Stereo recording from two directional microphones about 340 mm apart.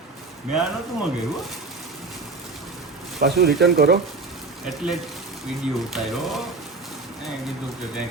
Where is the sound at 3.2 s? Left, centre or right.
Right.